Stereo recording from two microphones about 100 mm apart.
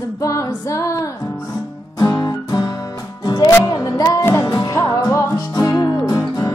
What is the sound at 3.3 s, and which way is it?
Music, 45° left (ahead or behind).